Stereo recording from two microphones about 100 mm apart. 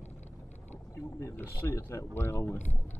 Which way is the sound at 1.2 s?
25° left (ahead or behind).